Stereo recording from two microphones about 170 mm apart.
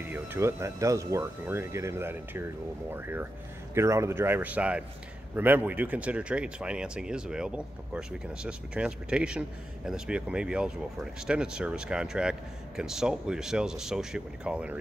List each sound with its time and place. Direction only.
0.1 s speech: 15° right (ahead or behind)